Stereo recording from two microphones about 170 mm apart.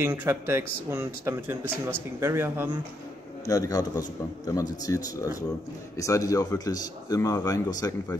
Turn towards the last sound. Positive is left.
turn(degrees=20)  # may be behind; listen again after turning